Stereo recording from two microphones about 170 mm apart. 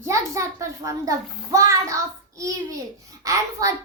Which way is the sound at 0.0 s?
15° right (ahead or behind).